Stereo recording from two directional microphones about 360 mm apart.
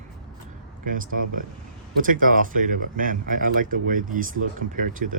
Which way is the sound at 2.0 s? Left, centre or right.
Right.